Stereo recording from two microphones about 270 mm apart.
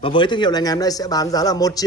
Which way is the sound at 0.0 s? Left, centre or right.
Centre.